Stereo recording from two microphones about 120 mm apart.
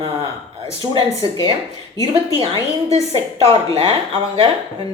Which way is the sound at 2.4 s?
50° right (ahead or behind).